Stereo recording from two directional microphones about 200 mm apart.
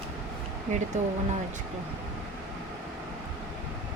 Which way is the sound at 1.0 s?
35° right (ahead or behind).